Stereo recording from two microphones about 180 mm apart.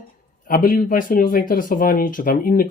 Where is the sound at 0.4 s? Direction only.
50° left (ahead or behind).